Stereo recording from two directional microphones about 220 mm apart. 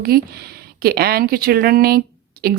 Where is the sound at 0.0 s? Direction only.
45° right (ahead or behind).